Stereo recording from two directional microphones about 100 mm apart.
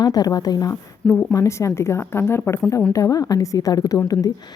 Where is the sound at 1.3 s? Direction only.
30° left (ahead or behind).